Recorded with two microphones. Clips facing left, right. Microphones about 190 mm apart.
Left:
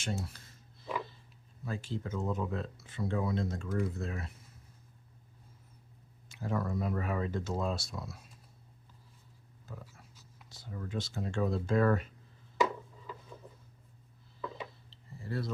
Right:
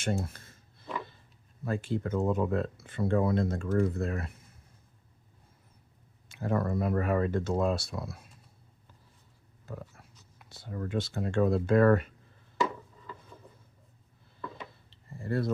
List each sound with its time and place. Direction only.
0.0 s a sound: 55° right (ahead or behind)
1.6 s speech: 55° right (ahead or behind)
6.2 s speech: 60° right (ahead or behind)
9.7 s speech: 60° right (ahead or behind)
14.8 s tick-tock: 55° right (ahead or behind)